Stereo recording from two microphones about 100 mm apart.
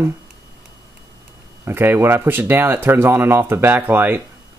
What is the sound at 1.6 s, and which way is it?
Speech, 25° right (ahead or behind).